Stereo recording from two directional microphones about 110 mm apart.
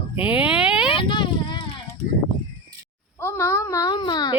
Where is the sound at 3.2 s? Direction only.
25° left (ahead or behind); by 4.4 s 40° left (ahead or behind).